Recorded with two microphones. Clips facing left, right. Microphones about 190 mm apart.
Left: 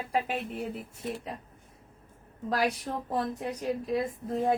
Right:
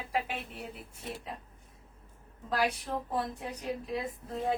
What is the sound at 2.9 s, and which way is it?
Speech, 40° left (ahead or behind).